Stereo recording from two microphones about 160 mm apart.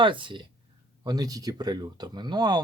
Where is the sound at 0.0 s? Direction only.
30° right (ahead or behind).